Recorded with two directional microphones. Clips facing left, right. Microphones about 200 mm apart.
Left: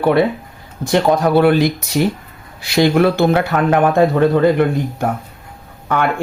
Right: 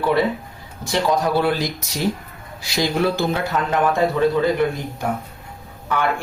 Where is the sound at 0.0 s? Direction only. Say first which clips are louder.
Left 5 dB; 60° left (ahead or behind).